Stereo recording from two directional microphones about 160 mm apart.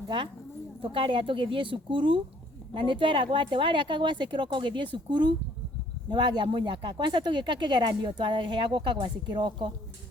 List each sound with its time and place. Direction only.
0.8 s speech: 30° right (ahead or behind)